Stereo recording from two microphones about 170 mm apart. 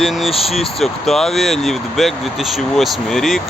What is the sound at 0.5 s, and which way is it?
Speech, centre (ahead or behind).